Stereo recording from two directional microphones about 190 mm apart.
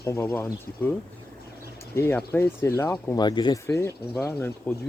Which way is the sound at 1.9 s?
10° left (ahead or behind).